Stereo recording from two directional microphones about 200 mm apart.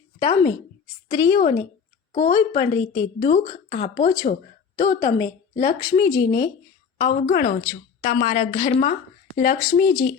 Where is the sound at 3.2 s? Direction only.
40° left (ahead or behind).